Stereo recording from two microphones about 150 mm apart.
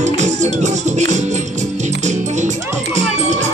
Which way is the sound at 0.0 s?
50° right (ahead or behind).